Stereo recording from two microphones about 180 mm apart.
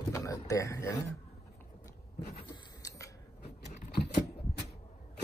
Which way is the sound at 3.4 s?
65° left (ahead or behind).